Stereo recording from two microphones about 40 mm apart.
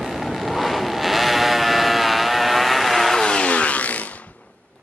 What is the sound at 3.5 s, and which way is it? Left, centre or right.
Vehicle, left.